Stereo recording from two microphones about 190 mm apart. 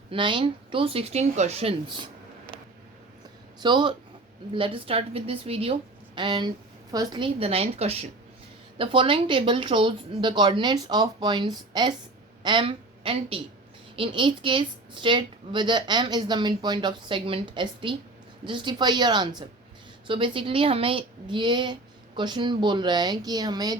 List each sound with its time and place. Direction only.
0.1 s a woman's voice: 25° right (ahead or behind)
3.6 s a woman's voice: 25° right (ahead or behind)